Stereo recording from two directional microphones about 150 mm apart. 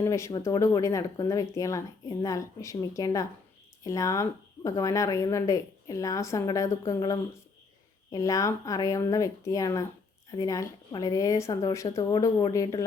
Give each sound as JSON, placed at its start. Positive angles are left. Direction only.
{"t": 0.0, "sound": "speech", "side_deg": 20}